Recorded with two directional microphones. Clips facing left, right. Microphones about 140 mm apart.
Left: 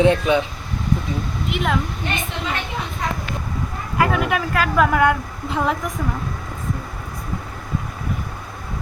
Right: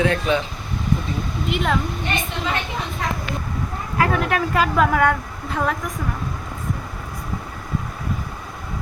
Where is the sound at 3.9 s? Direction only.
5° left (ahead or behind).